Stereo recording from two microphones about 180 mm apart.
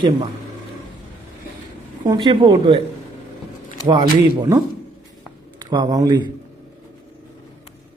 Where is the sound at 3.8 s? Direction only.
25° right (ahead or behind).